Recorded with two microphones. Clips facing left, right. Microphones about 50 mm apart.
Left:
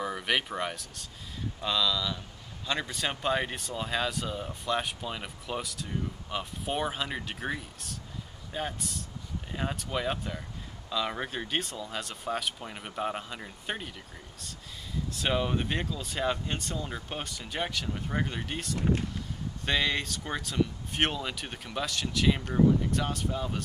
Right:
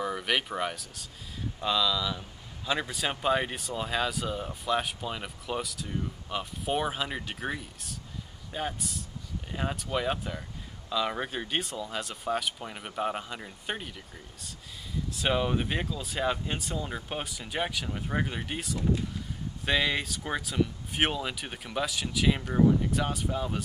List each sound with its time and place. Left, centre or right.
0.0 s speech: centre
15.0 s speech: centre
18.8 s speech: left
19.6 s speech: centre